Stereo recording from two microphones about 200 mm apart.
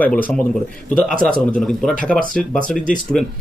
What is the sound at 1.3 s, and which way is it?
Speech, 5° left (ahead or behind).